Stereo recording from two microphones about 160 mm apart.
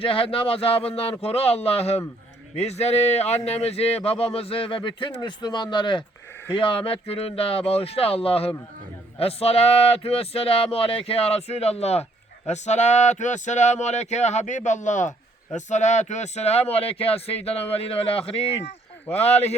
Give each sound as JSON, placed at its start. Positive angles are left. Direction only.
{"t": 0.0, "sound": "speech", "side_deg": 35}